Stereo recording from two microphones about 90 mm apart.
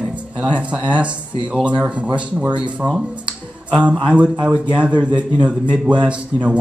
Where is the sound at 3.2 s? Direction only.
15° right (ahead or behind).